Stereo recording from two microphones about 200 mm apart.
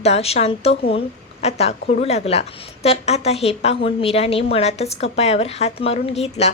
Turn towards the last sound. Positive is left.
turn(degrees=30)  # may be behind; listen again after turning